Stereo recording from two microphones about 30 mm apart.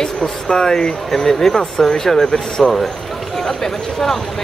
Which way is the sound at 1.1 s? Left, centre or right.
Centre.